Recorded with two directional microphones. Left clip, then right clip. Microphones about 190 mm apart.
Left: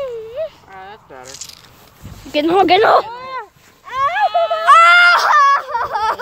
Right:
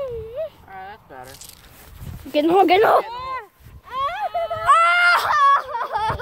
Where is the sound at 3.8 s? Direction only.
10° right (ahead or behind).